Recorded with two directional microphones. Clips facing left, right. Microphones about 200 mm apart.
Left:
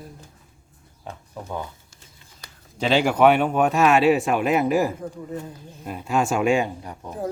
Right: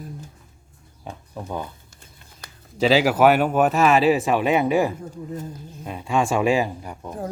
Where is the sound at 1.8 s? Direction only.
55° right (ahead or behind).